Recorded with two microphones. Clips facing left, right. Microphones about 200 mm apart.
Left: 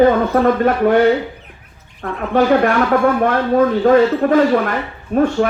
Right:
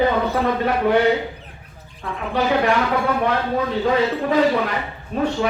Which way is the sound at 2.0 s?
50° left (ahead or behind).